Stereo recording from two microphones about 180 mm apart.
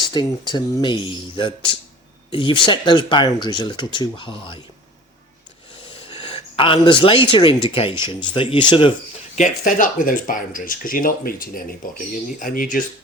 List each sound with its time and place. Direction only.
0.1 s speech: 25° left (ahead or behind)
6.3 s speech: 30° left (ahead or behind)
9.3 s speech: 45° left (ahead or behind)